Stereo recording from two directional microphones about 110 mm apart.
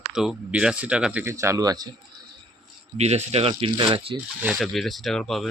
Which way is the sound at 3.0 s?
80° right.